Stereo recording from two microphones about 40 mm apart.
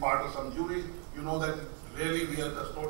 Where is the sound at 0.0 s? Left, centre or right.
Centre.